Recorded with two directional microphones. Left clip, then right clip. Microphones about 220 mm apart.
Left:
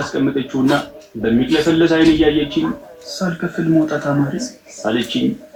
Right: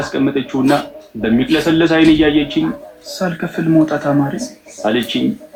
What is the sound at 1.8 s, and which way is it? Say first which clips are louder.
Speech: right 3 dB; 35° right (ahead or behind).